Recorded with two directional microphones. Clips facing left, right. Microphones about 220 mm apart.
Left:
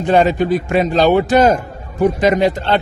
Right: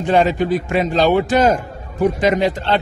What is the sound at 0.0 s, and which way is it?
A man's voice, 40° left (ahead or behind).